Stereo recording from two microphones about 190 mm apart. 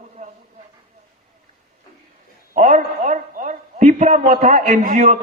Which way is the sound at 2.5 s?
40° right (ahead or behind).